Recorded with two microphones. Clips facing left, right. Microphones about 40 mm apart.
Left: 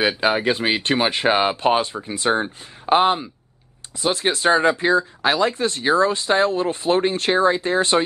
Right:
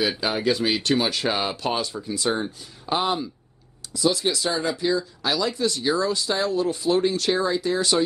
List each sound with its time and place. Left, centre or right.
0.2 s speech: left